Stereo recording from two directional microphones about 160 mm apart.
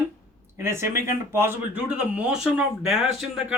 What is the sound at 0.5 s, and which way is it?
Speech, 15° right (ahead or behind).